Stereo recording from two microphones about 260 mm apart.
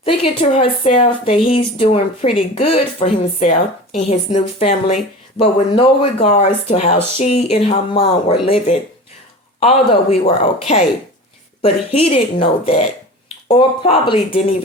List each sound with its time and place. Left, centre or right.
0.0 s speech: left